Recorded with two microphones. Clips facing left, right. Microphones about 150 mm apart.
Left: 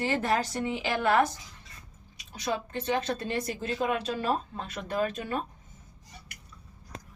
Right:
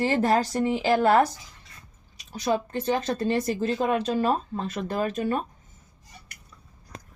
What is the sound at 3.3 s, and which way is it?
Speech, 40° right (ahead or behind).